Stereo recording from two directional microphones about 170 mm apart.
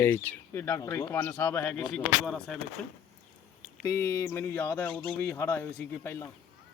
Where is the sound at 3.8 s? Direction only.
15° left (ahead or behind).